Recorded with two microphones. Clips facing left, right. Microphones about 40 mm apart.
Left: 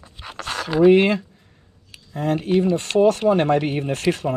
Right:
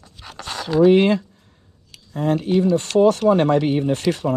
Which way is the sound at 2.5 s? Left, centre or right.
Left.